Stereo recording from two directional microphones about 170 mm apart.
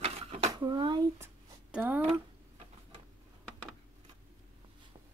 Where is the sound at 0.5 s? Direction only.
25° right (ahead or behind).